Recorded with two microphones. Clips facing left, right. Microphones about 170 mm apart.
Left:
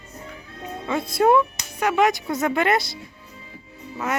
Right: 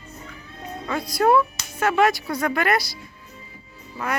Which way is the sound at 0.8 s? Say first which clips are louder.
Left 1 dB; 25° left (ahead or behind).